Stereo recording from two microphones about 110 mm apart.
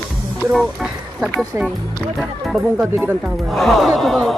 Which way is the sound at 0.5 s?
5° right (ahead or behind).